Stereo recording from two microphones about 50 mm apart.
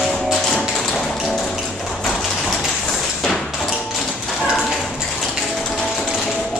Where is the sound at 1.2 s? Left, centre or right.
Centre.